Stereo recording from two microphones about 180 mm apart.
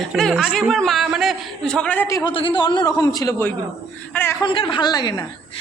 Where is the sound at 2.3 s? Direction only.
25° left (ahead or behind); by 4.3 s 10° left (ahead or behind).